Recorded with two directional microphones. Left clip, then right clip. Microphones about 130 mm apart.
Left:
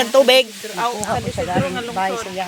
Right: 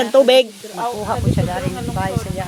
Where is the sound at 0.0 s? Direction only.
60° right (ahead or behind).